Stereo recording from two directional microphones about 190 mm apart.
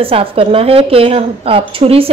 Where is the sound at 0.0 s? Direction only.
30° right (ahead or behind).